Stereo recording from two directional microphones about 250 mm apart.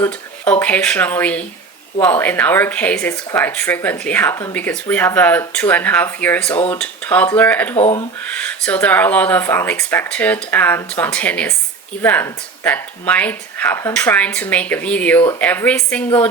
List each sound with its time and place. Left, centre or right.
0.6 s speech: centre
7.8 s speech: left
8.3 s speech: centre